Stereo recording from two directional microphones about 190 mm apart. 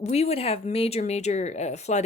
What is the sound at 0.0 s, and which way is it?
Speech, 35° left (ahead or behind).